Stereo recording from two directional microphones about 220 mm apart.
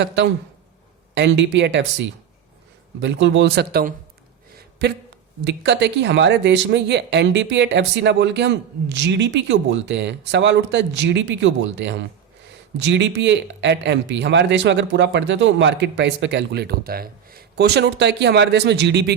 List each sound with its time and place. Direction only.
1.1 s speech: 55° right (ahead or behind)